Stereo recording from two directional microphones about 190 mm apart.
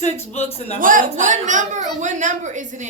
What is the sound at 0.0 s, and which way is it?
Speech, 35° left (ahead or behind).